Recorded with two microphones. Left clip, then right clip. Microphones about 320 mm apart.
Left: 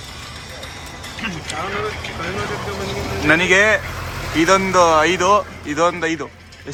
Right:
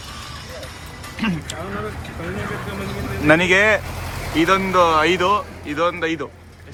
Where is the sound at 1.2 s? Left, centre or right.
Centre.